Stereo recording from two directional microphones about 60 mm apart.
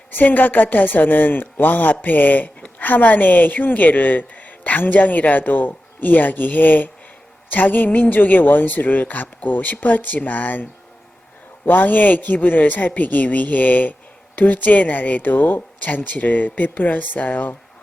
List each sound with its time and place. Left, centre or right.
0.1 s speech: left
2.6 s a sound: centre
2.8 s speech: left